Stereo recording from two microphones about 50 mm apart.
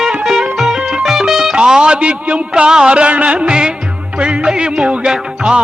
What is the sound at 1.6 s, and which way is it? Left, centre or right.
A man's voice, centre.